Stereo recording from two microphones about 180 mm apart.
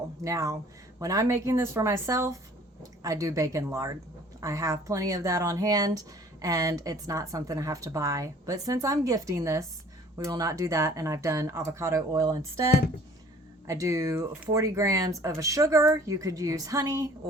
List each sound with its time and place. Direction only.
0.3 s speech: 20° right (ahead or behind)
13.7 s speech: 20° right (ahead or behind)